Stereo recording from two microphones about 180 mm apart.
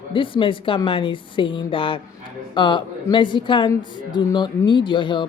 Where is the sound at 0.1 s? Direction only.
30° left (ahead or behind).